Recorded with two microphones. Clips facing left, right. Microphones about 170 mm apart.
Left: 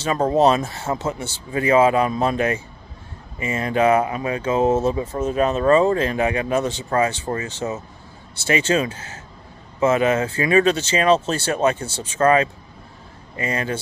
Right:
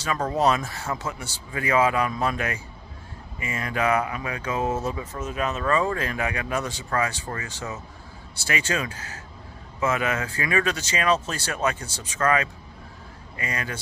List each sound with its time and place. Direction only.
0.0 s speech: 25° left (ahead or behind)